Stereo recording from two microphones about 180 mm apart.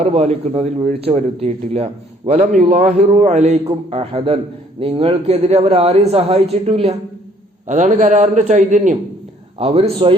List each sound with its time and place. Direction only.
0.0 s speech: 35° right (ahead or behind)
2.4 s a man's voice: 50° right (ahead or behind)
9.6 s speech: 35° right (ahead or behind)